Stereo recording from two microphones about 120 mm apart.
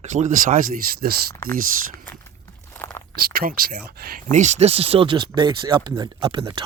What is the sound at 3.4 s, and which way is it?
Speech, 70° right (ahead or behind).